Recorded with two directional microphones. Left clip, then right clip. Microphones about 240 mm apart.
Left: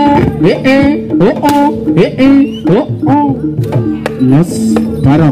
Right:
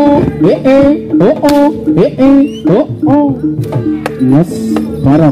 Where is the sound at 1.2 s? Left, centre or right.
Left.